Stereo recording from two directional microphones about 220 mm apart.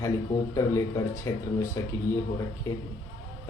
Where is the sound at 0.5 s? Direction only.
15° left (ahead or behind).